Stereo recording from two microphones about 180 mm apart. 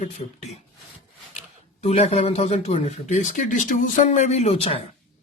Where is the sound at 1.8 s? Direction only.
40° left (ahead or behind).